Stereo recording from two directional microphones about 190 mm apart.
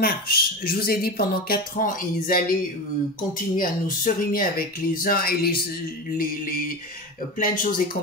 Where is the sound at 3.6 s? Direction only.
50° left (ahead or behind).